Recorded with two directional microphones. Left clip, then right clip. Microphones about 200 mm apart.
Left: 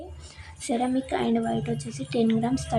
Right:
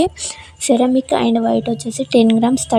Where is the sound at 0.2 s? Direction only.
45° right (ahead or behind).